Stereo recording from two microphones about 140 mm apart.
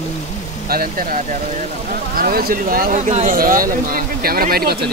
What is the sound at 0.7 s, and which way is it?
Speech, 90° right.